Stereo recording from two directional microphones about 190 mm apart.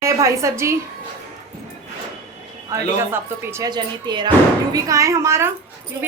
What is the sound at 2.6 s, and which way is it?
A woman's voice, 15° right (ahead or behind).